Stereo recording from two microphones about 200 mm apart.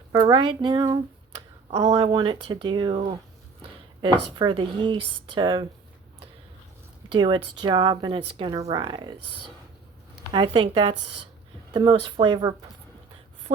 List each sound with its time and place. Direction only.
0.1 s speech: 25° right (ahead or behind)
4.4 s speech: 25° right (ahead or behind)
7.1 s speech: 25° right (ahead or behind)
10.3 s speech: 25° right (ahead or behind)